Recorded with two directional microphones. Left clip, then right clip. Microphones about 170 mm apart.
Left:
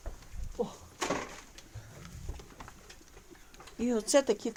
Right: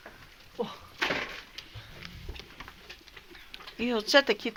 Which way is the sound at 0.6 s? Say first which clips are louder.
Right 1 dB; 15° right (ahead or behind).